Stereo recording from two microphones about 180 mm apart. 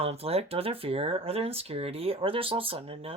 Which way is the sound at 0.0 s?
35° right (ahead or behind).